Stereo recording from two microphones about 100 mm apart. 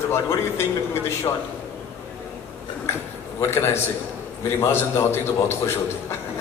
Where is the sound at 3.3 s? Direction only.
25° left (ahead or behind).